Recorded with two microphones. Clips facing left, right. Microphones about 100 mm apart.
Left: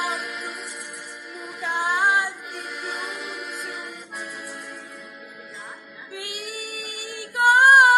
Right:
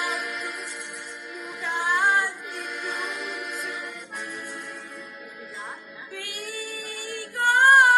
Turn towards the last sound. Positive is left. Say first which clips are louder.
# left 3 dB
turn(degrees=15)  # may be behind; listen again after turning